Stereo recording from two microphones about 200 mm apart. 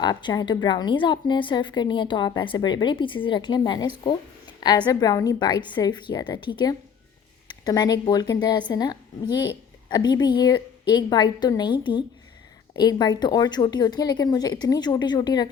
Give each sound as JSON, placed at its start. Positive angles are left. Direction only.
{"t": 0.0, "sound": "a woman's voice", "side_deg": 20}